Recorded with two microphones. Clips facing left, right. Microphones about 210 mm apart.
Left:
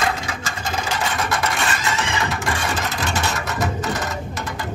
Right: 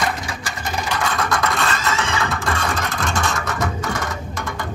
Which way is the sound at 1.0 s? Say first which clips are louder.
Right 3 dB; 20° left (ahead or behind).